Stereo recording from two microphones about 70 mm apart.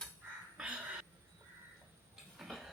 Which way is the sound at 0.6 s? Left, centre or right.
Centre.